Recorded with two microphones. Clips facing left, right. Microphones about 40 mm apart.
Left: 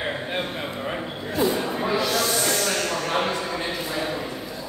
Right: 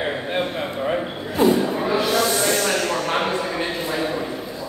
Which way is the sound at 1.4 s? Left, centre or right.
Right.